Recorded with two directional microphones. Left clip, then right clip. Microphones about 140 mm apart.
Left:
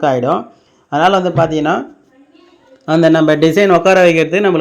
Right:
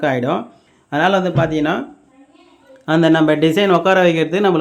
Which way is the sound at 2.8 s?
15° left (ahead or behind).